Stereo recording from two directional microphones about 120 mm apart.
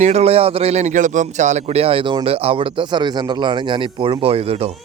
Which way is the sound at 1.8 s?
50° right (ahead or behind).